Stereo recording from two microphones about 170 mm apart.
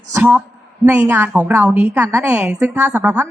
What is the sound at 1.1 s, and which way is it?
A woman's voice, 10° right (ahead or behind).